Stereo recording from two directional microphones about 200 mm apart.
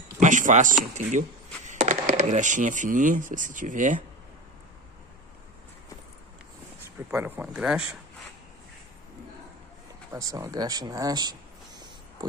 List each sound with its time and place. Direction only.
0.2 s speech: 40° right (ahead or behind)
6.8 s speech: 10° right (ahead or behind)
10.1 s speech: 15° right (ahead or behind)